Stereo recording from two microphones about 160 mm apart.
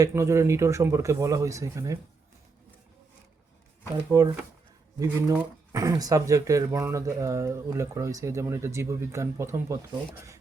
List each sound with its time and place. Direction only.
0.0 s speech: 15° right (ahead or behind)
4.1 s speech: 20° right (ahead or behind)